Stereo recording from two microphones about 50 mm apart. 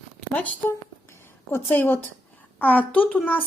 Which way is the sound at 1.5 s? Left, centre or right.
Left.